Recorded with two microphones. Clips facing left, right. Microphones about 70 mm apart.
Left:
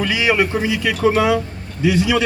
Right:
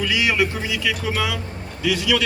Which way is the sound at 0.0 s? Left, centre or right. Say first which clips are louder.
Left 3 dB; left.